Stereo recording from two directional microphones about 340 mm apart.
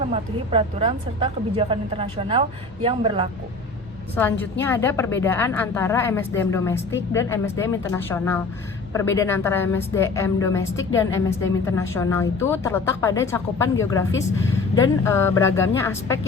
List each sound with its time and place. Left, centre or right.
0.1 s a woman's voice: centre
4.1 s a woman's voice: centre